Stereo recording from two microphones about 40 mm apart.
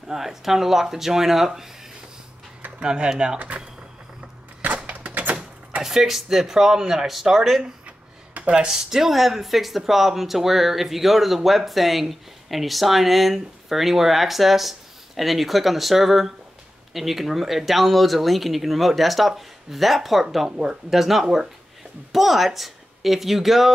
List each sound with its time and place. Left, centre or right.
0.1 s speech: centre
2.8 s speech: right
4.7 s a sound: right
5.3 s a sound: right
5.9 s speech: centre
8.5 s speech: centre